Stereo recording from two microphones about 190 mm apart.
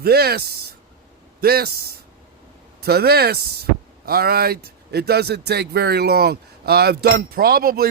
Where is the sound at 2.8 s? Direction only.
55° right (ahead or behind).